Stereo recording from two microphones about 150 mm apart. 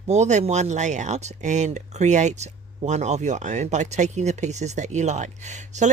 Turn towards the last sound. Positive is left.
turn(degrees=-55)  # may be behind; listen again after turning